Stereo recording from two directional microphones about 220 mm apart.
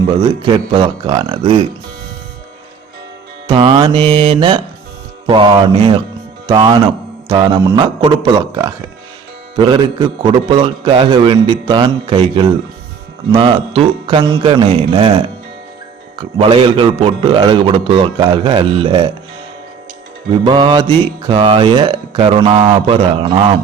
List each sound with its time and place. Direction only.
0.2 s a man's voice: 20° right (ahead or behind)
3.4 s a man's voice: 20° right (ahead or behind)
16.4 s a man's voice: 25° right (ahead or behind)
20.4 s a man's voice: 20° right (ahead or behind)